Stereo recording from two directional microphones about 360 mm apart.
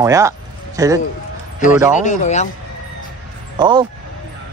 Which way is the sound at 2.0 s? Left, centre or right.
Centre.